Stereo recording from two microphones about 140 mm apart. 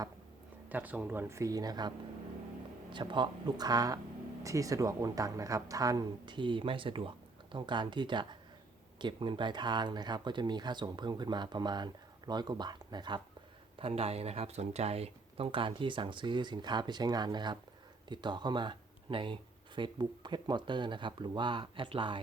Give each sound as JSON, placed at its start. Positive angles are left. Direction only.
{"t": 0.7, "sound": "speech", "side_deg": -10}
{"t": 2.9, "sound": "speech", "side_deg": -35}
{"t": 13.7, "sound": "speech", "side_deg": -45}